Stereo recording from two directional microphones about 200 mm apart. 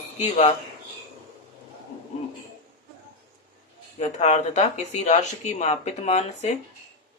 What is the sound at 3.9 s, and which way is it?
Speech, 35° left (ahead or behind).